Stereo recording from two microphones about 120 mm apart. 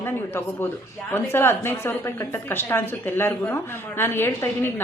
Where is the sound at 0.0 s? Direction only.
20° left (ahead or behind).